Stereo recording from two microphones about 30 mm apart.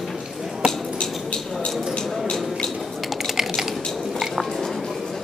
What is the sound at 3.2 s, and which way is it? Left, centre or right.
Typing, centre.